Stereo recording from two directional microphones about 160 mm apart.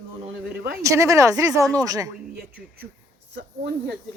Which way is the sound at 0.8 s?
20° right (ahead or behind).